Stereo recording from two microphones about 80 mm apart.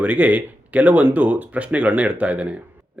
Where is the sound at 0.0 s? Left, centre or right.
Centre.